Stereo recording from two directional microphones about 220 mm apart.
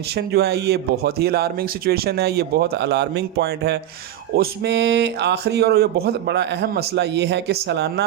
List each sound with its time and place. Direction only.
0.2 s speech: 50° right (ahead or behind)